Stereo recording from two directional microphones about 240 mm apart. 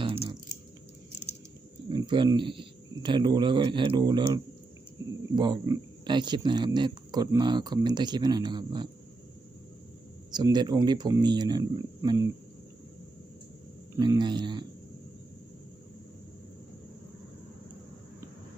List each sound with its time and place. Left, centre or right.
0.0 s a sound: right
1.9 s speech: centre
5.4 s speech: centre
10.3 s speech: centre
13.9 s speech: centre